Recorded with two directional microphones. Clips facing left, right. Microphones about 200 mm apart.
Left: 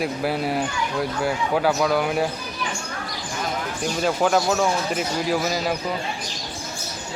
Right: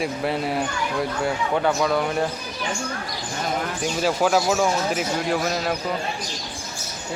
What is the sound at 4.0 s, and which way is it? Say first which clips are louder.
Speech: even; centre (ahead or behind).